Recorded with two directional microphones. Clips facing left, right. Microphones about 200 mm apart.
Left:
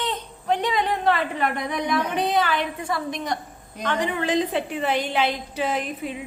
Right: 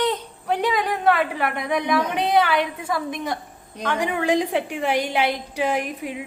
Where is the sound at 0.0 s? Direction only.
10° right (ahead or behind).